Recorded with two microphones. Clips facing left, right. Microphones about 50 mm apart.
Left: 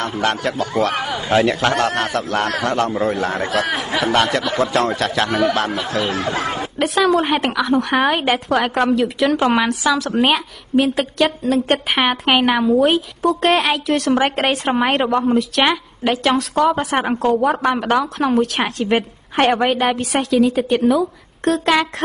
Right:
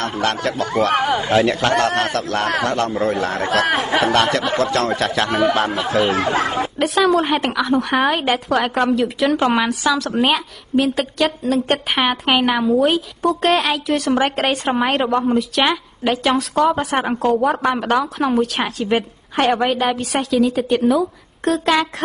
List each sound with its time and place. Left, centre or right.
0.2 s a woman's voice: centre
0.9 s speech: right
1.3 s a woman's voice: centre
3.4 s speech: right
4.1 s a woman's voice: centre
5.7 s speech: right
6.8 s a woman's voice: centre